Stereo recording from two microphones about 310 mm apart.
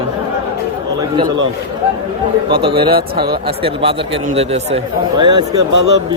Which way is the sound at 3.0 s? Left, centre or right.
Right.